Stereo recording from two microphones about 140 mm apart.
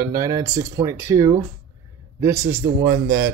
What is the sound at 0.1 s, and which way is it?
A man's voice, 25° right (ahead or behind).